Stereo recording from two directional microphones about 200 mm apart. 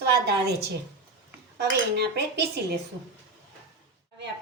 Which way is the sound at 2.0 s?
55° right (ahead or behind).